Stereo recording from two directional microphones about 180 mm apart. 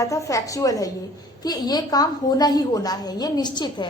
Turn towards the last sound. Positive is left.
turn(degrees=25)  # may be behind; listen again after turning